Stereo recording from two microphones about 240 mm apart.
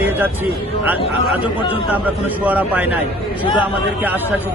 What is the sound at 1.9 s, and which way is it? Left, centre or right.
A man's voice, centre.